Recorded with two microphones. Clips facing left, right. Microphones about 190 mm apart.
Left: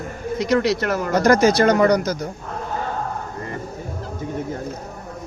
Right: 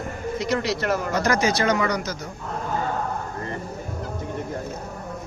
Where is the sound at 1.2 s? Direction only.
35° left (ahead or behind).